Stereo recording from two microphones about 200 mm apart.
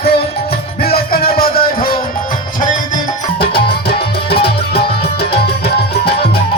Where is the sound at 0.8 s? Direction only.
50° left (ahead or behind).